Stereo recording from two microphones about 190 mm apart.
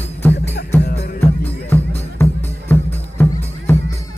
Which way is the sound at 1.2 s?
10° left (ahead or behind).